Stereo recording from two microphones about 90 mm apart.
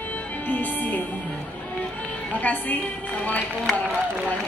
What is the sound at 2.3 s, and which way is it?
Music, 15° left (ahead or behind).